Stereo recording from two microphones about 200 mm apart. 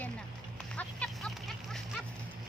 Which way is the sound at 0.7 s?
5° left (ahead or behind).